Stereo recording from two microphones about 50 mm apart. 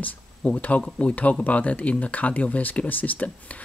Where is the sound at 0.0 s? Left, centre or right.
Left.